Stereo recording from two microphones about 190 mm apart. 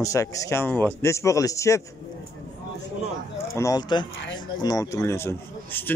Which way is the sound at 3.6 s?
20° left (ahead or behind).